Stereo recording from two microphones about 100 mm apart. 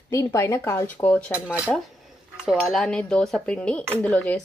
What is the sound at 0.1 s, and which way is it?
Speech, 30° left (ahead or behind).